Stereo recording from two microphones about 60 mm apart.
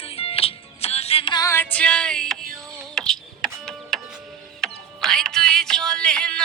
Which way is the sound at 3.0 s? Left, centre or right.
Centre.